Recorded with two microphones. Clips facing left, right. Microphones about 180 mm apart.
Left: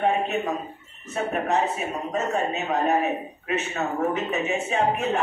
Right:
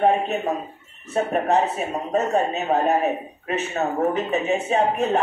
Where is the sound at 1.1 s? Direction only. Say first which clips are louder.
Right 4 dB; 35° right (ahead or behind).